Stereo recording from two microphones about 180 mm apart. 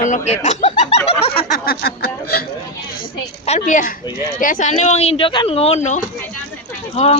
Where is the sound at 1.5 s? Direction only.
60° left (ahead or behind).